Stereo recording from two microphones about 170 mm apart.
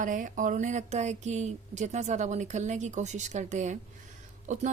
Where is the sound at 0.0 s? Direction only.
50° right (ahead or behind).